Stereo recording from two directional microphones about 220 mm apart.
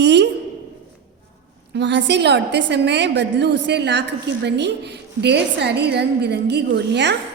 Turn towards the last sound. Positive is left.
turn(degrees=-50)  # may be behind; listen again after turning